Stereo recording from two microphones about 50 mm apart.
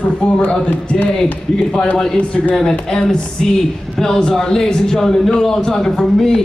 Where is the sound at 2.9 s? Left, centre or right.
Centre.